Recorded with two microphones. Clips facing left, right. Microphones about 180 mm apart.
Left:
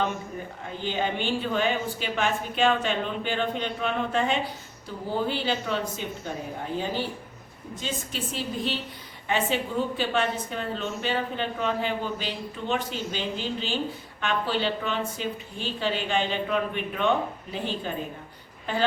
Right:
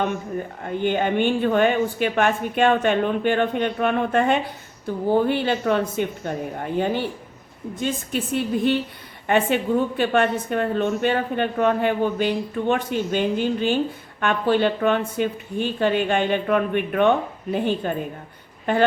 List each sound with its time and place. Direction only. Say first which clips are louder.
0.6 s a woman's voice: right 7 dB; 55° right (ahead or behind)